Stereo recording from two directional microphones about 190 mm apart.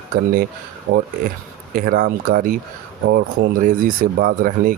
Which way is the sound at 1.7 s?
50° right (ahead or behind).